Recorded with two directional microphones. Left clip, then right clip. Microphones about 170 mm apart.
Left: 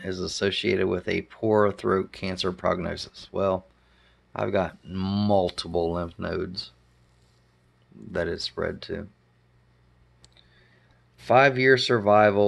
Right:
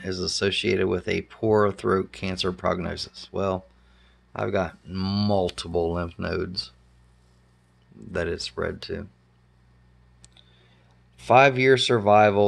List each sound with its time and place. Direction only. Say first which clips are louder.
0.0 s speech: right 1 dB; centre (ahead or behind)
8.0 s speech: even; 5° left (ahead or behind)
11.1 s speech: right 2 dB; 5° right (ahead or behind)